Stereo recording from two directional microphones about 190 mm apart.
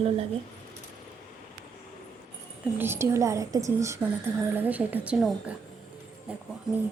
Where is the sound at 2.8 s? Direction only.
15° right (ahead or behind).